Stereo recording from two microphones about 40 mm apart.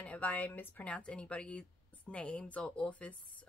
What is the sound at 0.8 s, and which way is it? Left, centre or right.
A woman's voice, left.